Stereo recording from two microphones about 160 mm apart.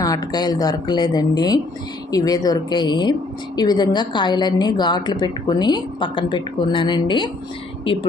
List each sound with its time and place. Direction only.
0.0 s speech: 25° left (ahead or behind)